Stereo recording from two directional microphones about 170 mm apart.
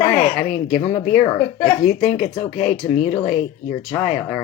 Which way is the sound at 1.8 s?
40° left (ahead or behind).